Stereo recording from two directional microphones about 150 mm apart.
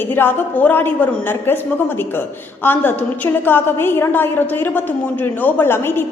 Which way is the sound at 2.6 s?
15° left (ahead or behind).